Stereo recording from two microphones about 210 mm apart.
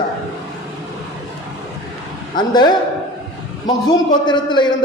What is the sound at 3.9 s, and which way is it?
Speech, 20° left (ahead or behind).